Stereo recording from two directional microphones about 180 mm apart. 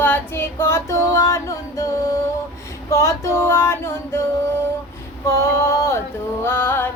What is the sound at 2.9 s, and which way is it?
Female singing, 15° left (ahead or behind).